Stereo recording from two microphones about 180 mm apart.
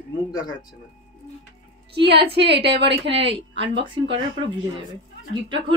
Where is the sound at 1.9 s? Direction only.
65° right (ahead or behind).